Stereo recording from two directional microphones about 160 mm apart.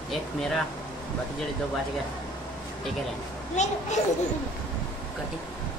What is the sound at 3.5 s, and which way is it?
Speech, 45° left (ahead or behind).